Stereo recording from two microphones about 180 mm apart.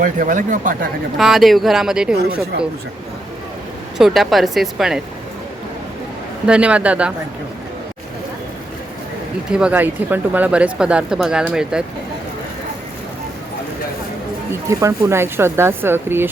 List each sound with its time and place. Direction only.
0.0 s speech: 45° right (ahead or behind)
1.2 s speech: centre (ahead or behind)
3.9 s speech: centre (ahead or behind)
6.4 s speech: 5° right (ahead or behind)
9.5 s speech: 5° right (ahead or behind)
14.5 s speech: 15° right (ahead or behind)